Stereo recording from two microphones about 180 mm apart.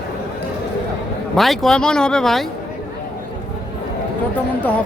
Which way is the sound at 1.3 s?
Centre (ahead or behind).